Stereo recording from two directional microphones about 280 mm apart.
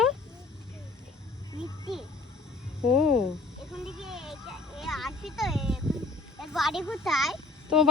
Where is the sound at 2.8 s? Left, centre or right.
Centre.